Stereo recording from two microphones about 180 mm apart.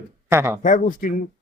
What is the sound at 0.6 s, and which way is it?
Speech, 45° left (ahead or behind).